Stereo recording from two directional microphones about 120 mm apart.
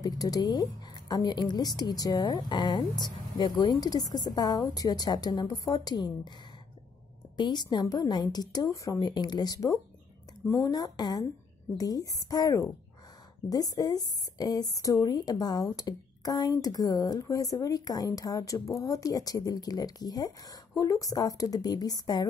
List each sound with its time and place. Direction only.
0.0 s a woman's voice: 35° left (ahead or behind)
7.3 s a woman's voice: 35° left (ahead or behind)